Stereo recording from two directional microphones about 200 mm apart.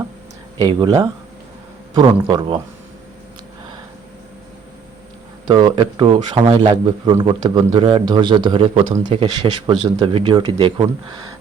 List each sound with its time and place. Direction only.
0.6 s a man's voice: 20° right (ahead or behind)
5.5 s a man's voice: 25° right (ahead or behind)